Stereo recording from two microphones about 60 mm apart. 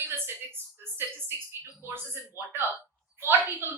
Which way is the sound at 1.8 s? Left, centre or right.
Right.